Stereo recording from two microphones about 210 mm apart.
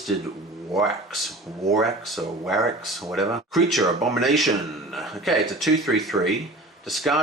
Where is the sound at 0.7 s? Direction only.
Centre (ahead or behind).